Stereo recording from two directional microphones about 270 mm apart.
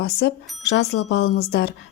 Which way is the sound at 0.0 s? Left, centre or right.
Left.